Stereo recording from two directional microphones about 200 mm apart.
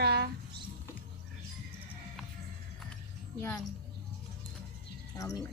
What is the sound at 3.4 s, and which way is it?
Speech, 10° left (ahead or behind).